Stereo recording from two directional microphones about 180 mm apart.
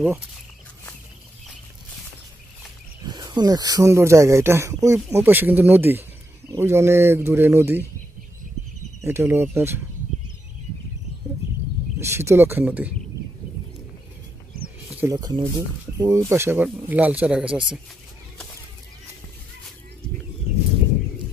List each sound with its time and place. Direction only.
3.1 s speech: 25° right (ahead or behind)
9.0 s speech: 15° right (ahead or behind)
12.0 s speech: 15° right (ahead or behind)
15.0 s speech: 20° right (ahead or behind)